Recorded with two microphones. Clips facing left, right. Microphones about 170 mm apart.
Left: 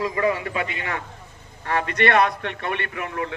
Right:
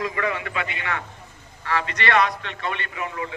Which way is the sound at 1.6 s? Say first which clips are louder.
Left 4 dB; 50° left (ahead or behind).